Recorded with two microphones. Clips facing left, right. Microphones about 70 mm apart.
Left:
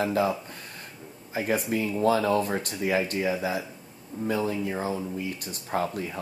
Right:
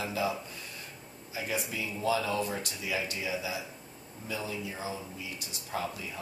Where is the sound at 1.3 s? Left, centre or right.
Left.